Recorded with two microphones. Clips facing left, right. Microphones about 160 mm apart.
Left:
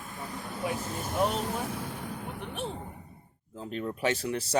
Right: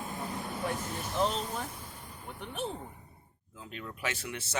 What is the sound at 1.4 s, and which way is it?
Vehicle, 80° left.